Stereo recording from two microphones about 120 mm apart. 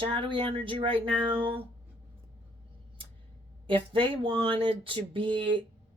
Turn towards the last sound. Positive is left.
turn(degrees=-45)  # may be behind; listen again after turning